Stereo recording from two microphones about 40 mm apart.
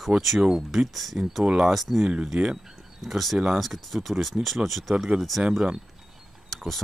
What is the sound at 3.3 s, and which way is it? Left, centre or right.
Speech, centre.